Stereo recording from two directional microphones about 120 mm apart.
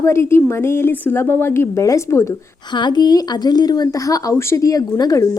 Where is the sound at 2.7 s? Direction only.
40° left (ahead or behind).